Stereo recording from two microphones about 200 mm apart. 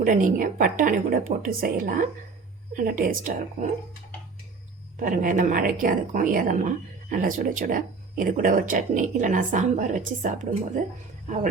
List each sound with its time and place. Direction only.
0.0 s a woman's voice: 40° right (ahead or behind)
4.9 s a woman's voice: 40° right (ahead or behind)